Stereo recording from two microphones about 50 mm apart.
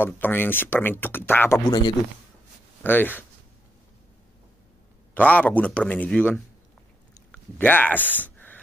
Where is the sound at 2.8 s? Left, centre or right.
Left.